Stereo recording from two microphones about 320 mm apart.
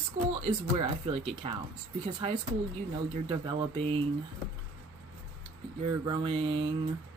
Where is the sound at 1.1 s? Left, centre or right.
Centre.